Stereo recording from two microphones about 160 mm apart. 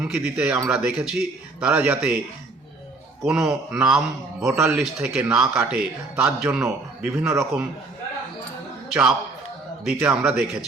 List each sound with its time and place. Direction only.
0.0 s a man's voice: 5° right (ahead or behind)
3.2 s a man's voice: 5° right (ahead or behind)
4.4 s a man's voice: 15° right (ahead or behind)
4.8 s a man's voice: 5° right (ahead or behind)
8.9 s a man's voice: 5° right (ahead or behind)